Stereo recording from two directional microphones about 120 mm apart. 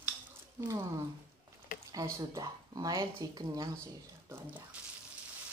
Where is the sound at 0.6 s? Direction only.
25° right (ahead or behind).